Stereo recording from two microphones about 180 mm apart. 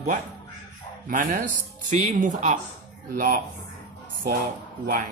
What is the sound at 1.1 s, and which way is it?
Speech, 45° right (ahead or behind).